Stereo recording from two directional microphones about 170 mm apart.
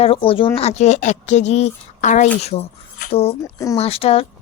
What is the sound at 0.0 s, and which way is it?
A woman's voice, 35° left (ahead or behind).